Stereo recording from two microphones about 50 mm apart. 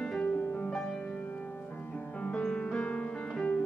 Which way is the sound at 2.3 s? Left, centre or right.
Centre.